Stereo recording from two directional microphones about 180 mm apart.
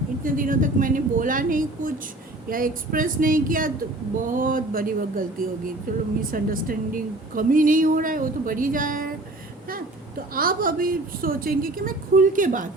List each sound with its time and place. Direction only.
0.2 s a woman's voice: 50° right (ahead or behind)
10.3 s a woman's voice: 50° right (ahead or behind)